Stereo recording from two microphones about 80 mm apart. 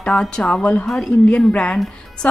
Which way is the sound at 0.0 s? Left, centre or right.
Centre.